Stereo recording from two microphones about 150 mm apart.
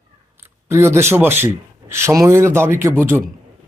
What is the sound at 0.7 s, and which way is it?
Speech, 20° right (ahead or behind).